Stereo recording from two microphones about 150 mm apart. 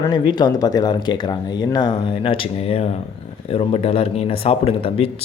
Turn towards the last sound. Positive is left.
turn(degrees=40)  # may be behind; listen again after turning